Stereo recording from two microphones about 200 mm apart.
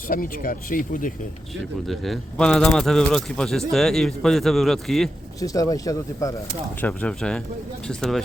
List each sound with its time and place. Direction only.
0.1 s speech: 45° left (ahead or behind)
1.9 s speech: centre (ahead or behind)
5.4 s speech: 15° left (ahead or behind)
6.8 s speech: 5° left (ahead or behind)